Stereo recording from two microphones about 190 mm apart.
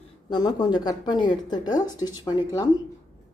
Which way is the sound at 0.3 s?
20° left (ahead or behind).